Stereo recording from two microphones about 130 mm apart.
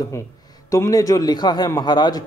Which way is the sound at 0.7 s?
25° left (ahead or behind).